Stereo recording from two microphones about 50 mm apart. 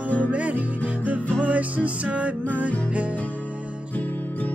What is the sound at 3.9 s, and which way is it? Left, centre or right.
Music, left.